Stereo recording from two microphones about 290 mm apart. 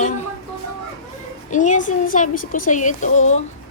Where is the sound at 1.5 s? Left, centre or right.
Left.